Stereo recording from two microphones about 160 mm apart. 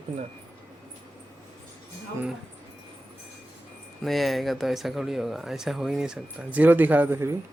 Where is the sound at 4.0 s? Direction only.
Centre (ahead or behind).